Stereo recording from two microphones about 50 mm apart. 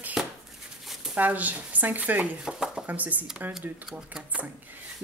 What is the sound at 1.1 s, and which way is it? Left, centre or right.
Speech, right.